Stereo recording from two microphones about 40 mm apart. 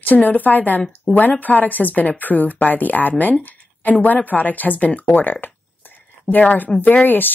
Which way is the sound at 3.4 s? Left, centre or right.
Left.